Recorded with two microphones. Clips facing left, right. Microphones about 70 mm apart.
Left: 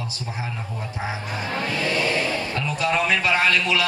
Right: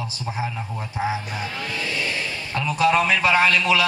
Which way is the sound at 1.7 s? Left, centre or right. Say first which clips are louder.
Left 5 dB; left.